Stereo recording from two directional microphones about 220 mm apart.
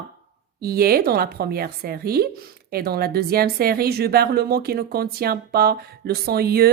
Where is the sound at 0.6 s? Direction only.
45° right (ahead or behind).